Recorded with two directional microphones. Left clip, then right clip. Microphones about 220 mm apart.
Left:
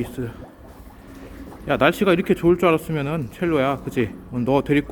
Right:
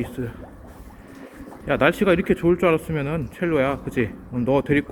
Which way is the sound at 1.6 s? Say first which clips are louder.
Left 1 dB; 10° left (ahead or behind).